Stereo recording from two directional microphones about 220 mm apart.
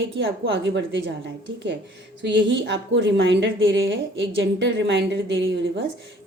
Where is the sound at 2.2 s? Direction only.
55° right (ahead or behind).